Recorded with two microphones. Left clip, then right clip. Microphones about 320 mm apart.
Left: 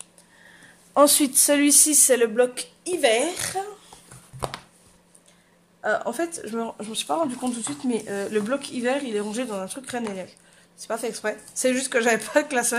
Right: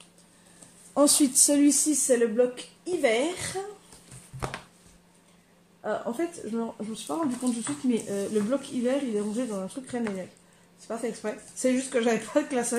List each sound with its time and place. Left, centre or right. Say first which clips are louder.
0.9 s speech: left 4 dB; left
5.8 s speech: left 5 dB; left